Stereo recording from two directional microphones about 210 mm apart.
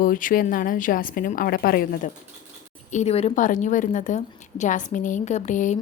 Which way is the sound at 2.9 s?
30° left (ahead or behind).